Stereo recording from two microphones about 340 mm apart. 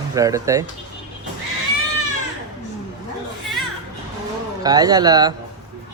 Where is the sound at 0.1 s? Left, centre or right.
Centre.